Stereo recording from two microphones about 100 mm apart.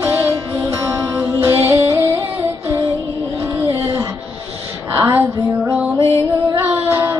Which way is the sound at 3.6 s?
30° right (ahead or behind).